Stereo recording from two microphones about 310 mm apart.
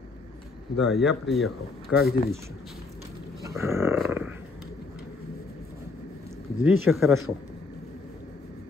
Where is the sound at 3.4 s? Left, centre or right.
Centre.